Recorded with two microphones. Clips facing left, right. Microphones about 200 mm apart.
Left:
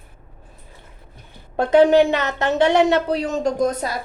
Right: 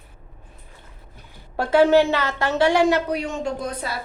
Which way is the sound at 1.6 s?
20° left (ahead or behind).